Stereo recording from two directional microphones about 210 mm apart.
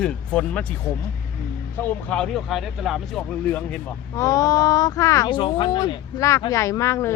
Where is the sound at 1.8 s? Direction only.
5° left (ahead or behind).